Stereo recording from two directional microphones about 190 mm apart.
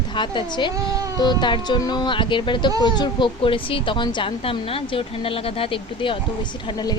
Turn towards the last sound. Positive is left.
turn(degrees=25)  # may be behind; listen again after turning